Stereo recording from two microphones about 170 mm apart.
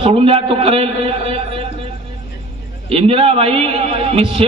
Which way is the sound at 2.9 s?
35° right (ahead or behind).